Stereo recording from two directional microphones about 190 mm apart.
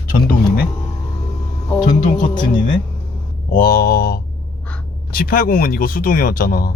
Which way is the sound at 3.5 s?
50° left (ahead or behind).